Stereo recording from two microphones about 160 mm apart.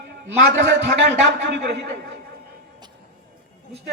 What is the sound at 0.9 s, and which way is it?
A man's voice, 90° right.